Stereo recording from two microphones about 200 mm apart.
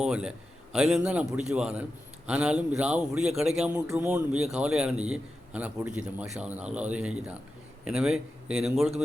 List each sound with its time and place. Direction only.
0.0 s a man's voice: 5° right (ahead or behind)